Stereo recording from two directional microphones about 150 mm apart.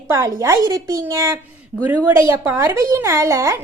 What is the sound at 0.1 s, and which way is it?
A woman's voice, 20° right (ahead or behind).